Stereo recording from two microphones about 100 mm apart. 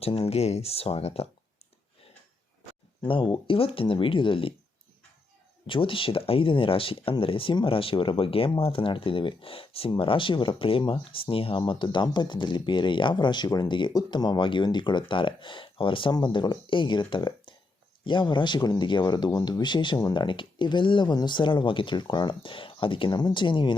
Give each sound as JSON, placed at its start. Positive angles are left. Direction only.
{"t": 0.0, "sound": "speech", "side_deg": 80}
{"t": 3.0, "sound": "speech", "side_deg": 55}
{"t": 5.6, "sound": "speech", "side_deg": 60}
{"t": 20.2, "sound": "speech", "side_deg": 55}
{"t": 23.0, "sound": "speech", "side_deg": 45}